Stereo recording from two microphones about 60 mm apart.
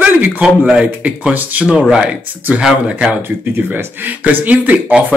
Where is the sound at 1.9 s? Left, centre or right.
Centre.